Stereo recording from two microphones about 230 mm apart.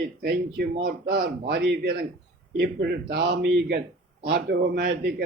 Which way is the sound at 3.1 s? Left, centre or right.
Right.